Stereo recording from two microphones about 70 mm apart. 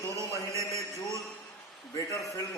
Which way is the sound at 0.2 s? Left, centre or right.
Right.